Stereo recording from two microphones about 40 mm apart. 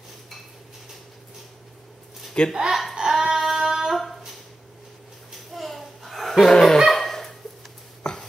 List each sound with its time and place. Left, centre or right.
2.5 s speech: centre
3.0 s female singing: centre
5.5 s a sound: centre
6.5 s dog: centre
6.8 s dog: centre